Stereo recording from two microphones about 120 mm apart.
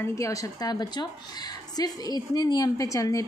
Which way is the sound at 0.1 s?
25° left (ahead or behind).